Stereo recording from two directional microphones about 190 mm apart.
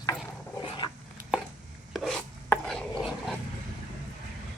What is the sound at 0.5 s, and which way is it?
Dog, 25° left (ahead or behind).